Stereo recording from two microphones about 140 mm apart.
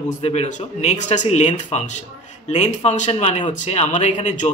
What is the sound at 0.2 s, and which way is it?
Speech, 50° left (ahead or behind).